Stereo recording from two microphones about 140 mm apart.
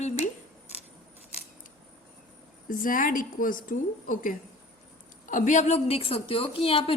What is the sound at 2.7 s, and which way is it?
A woman's voice, 75° left (ahead or behind).